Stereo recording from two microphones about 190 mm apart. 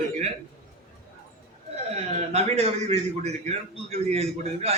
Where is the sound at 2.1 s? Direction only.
35° right (ahead or behind).